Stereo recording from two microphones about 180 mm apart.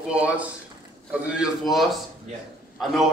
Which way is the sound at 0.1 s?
5° right (ahead or behind).